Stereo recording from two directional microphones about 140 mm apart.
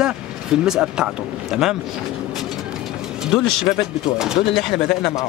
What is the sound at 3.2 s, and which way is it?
Speech, 5° right (ahead or behind).